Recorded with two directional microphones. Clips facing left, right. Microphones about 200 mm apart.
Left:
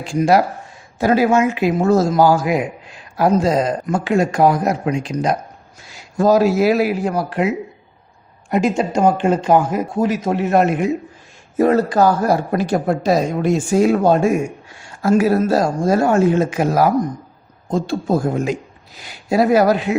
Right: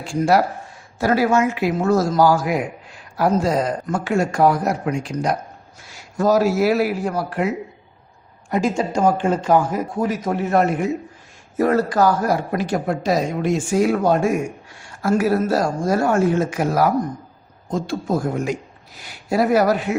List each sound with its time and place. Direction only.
0.0 s speech: 20° left (ahead or behind)